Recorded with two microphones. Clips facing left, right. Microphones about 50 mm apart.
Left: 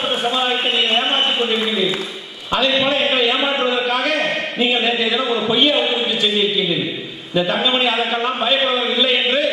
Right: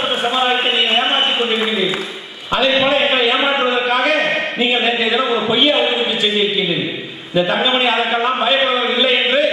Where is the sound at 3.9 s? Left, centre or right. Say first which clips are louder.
Right 3 dB; right.